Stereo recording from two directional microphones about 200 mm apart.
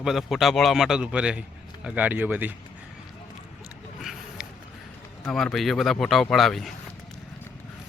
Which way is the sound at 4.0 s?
Centre (ahead or behind).